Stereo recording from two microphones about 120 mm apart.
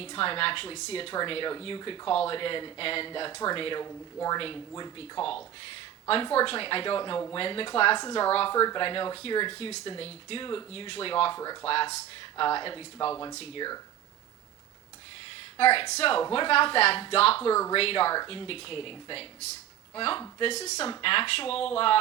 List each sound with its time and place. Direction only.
0.0 s speech: 50° left (ahead or behind)
3.8 s speech: 30° left (ahead or behind)
4.4 s speech: 45° left (ahead or behind)
8.3 s speech: 50° left (ahead or behind)
8.5 s speech: 35° left (ahead or behind)
15.5 s speech: 50° left (ahead or behind)
17.5 s speech: 25° left (ahead or behind)
17.7 s speech: 50° left (ahead or behind)
21.0 s speech: 50° left (ahead or behind)